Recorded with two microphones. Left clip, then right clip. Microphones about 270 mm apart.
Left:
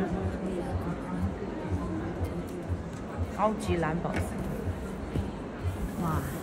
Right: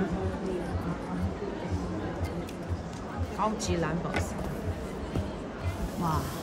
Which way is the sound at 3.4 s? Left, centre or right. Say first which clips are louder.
Left 2 dB; centre.